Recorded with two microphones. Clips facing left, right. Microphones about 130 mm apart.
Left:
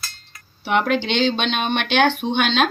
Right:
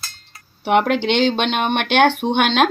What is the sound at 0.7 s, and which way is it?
Speech, 60° right (ahead or behind).